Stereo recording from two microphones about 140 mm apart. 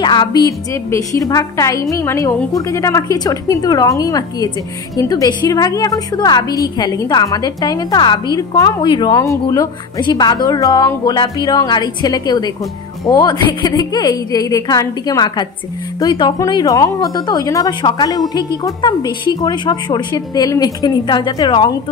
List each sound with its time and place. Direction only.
0.0 s a woman's voice: 30° left (ahead or behind)